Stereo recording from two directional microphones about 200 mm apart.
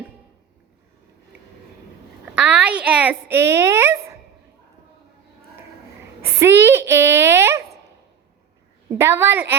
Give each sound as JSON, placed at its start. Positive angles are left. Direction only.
{"t": 2.2, "sound": "a woman's voice", "side_deg": -5}
{"t": 6.4, "sound": "a sound", "side_deg": -10}
{"t": 8.9, "sound": "a woman's voice", "side_deg": -10}